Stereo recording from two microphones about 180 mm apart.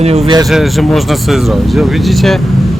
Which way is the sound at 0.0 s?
35° right (ahead or behind).